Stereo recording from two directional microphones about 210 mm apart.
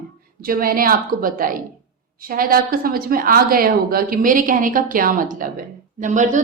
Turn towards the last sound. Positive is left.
turn(degrees=-35)  # may be behind; listen again after turning